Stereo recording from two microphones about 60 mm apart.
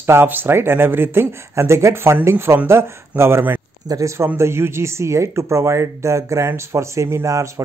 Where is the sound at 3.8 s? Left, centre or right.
Right.